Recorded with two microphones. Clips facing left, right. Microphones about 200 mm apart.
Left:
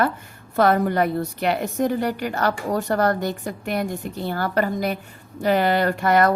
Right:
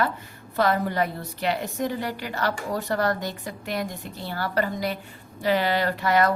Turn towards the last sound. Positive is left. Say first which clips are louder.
# left 4 dB
turn(degrees=50)  # may be behind; listen again after turning